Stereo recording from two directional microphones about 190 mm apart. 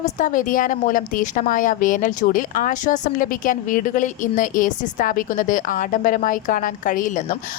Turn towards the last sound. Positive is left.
turn(degrees=40)  # may be behind; listen again after turning